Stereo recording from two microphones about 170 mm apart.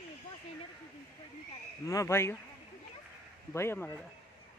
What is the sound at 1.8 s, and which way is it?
Speech, 15° left (ahead or behind).